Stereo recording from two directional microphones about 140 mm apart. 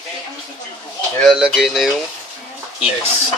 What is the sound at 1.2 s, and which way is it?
Speech, centre (ahead or behind).